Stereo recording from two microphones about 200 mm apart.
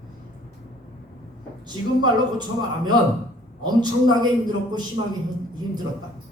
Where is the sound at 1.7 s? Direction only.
20° right (ahead or behind).